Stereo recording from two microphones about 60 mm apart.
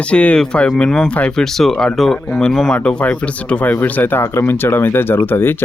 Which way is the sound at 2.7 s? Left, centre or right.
Centre.